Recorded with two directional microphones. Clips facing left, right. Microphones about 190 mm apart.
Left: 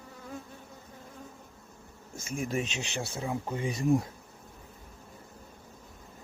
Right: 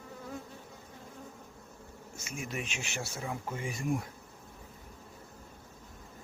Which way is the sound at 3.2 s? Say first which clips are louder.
Left 6 dB; 20° left (ahead or behind).